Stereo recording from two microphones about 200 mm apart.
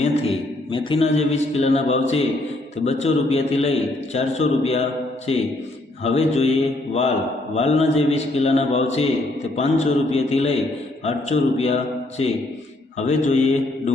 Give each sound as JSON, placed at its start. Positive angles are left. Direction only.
{"t": 0.0, "sound": "a man's voice", "side_deg": 30}
{"t": 7.5, "sound": "a man's voice", "side_deg": 30}